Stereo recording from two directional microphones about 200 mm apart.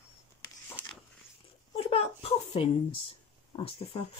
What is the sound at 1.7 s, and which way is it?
Speech, 30° left (ahead or behind).